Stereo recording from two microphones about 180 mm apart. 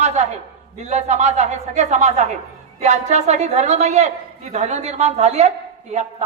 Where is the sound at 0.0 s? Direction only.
40° right (ahead or behind).